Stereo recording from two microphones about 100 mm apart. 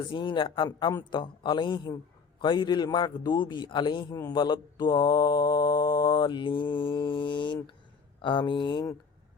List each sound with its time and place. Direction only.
0.1 s a man's voice: 55° left (ahead or behind)